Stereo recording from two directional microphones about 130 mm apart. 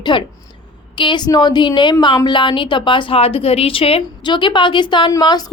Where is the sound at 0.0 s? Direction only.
40° left (ahead or behind).